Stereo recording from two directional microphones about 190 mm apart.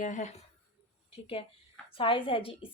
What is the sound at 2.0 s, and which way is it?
Speech, 30° left (ahead or behind).